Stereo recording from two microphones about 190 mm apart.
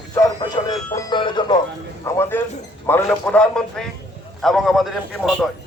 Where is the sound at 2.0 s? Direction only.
15° left (ahead or behind).